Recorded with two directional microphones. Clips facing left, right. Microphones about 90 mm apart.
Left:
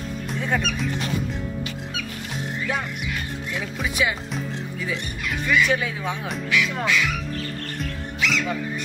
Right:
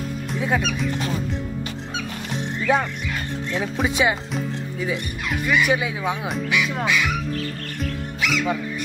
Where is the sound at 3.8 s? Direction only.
25° right (ahead or behind).